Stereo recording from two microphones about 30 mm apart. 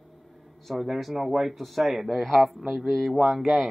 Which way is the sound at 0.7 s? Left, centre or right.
Centre.